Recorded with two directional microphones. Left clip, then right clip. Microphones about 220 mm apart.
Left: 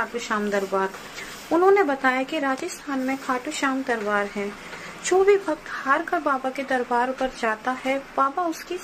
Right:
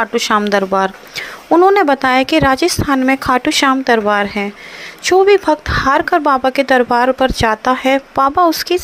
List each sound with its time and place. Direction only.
0.0 s speech: 45° right (ahead or behind)